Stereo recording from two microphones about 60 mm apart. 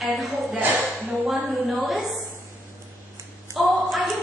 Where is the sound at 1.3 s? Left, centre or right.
Centre.